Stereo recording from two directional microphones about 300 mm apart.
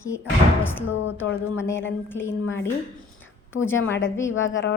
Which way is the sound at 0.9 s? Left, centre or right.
Left.